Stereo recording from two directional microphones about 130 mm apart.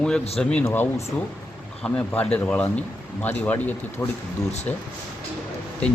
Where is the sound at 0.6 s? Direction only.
15° left (ahead or behind).